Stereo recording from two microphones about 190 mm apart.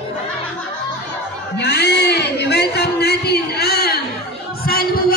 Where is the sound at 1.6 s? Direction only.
60° left (ahead or behind).